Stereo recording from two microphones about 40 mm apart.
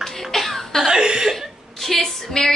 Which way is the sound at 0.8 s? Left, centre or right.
Centre.